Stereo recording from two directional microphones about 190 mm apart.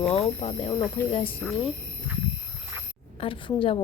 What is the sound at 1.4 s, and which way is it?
Speech, centre (ahead or behind).